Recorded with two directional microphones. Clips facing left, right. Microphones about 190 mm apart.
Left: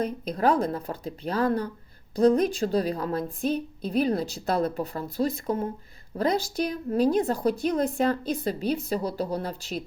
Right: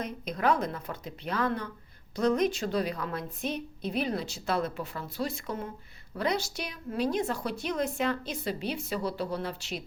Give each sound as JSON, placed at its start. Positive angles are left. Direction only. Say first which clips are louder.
{"t": 0.0, "sound": "a woman's voice", "louder": "left 5 dB", "side_deg": 35}